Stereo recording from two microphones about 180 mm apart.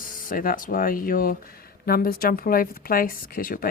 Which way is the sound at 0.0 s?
50° left (ahead or behind).